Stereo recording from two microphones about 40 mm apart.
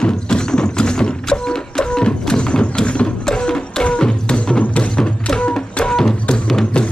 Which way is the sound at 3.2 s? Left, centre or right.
Centre.